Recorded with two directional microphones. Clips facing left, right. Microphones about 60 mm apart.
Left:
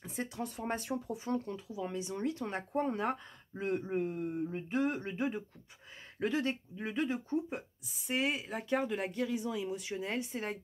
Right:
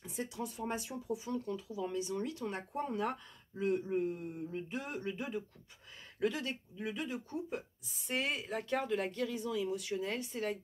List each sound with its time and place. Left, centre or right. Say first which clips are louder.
0.0 s speech: left 1 dB; left
1.8 s speech: left 1 dB; left
8.1 s speech: left 2 dB; centre; by 10.6 s left